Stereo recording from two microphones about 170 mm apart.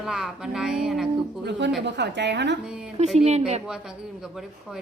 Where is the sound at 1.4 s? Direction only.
80° right.